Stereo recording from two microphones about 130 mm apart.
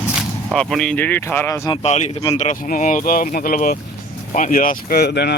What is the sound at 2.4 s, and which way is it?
Speech, 80° left.